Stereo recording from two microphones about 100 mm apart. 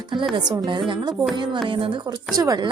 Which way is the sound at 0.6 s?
55° right (ahead or behind).